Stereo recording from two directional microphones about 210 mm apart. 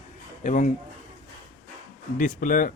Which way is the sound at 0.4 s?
35° left (ahead or behind).